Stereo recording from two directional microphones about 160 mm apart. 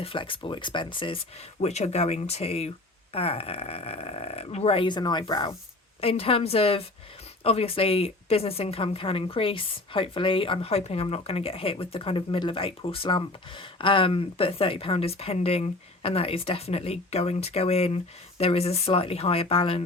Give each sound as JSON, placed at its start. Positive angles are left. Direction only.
{"t": 0.0, "sound": "a woman's voice", "side_deg": 35}
{"t": 1.6, "sound": "a woman's voice", "side_deg": 45}